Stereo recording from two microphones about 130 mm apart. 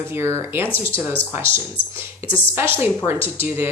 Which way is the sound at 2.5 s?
15° right (ahead or behind).